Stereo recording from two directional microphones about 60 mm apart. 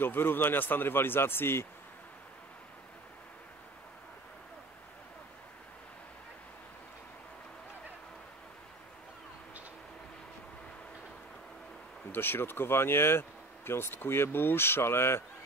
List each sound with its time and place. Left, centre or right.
0.0 s speech: left
12.1 s speech: left